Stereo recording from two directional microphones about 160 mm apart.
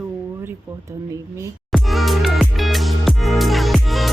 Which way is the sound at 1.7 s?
Centre (ahead or behind).